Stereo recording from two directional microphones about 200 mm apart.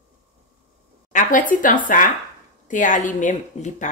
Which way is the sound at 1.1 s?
40° left (ahead or behind).